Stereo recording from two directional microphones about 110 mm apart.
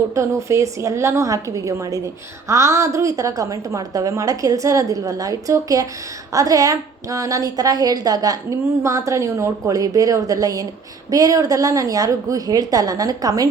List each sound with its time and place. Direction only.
0.1 s a woman's voice: 30° right (ahead or behind)